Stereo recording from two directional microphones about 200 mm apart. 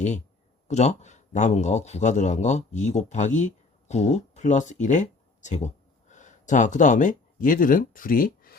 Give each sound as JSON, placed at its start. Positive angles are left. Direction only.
{"t": 0.7, "sound": "a man's voice", "side_deg": 35}